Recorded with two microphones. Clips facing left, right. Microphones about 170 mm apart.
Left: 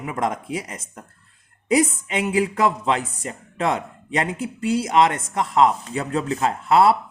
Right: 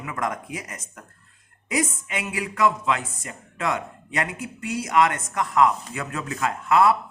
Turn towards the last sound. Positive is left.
turn(degrees=30)  # may be behind; listen again after turning